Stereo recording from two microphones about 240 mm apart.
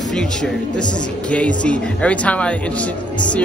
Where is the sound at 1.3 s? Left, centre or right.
Centre.